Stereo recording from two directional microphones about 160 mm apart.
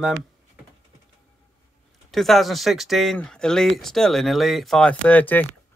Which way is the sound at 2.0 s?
Centre (ahead or behind).